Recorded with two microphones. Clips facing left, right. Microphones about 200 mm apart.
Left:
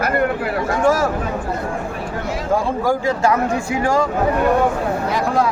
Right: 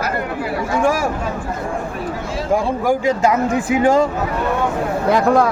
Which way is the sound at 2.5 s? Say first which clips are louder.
Right 2 dB; 15° right (ahead or behind).